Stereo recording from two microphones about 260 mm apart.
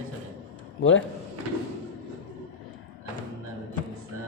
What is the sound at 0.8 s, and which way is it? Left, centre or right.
Speech, left.